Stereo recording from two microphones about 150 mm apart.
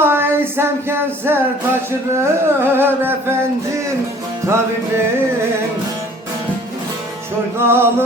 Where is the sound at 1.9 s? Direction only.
15° right (ahead or behind).